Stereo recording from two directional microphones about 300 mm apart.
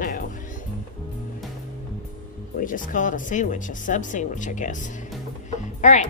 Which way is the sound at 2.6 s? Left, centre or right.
Left.